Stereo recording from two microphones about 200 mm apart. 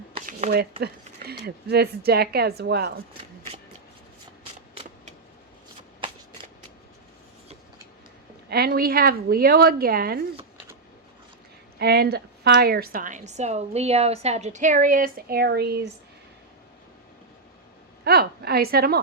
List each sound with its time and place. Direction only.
0.3 s a sound: 45° right (ahead or behind)
0.8 s speech: 50° right (ahead or behind)
8.4 s speech: 50° right (ahead or behind)
11.8 s a woman's voice: 55° right (ahead or behind)
18.0 s a woman's voice: 50° right (ahead or behind)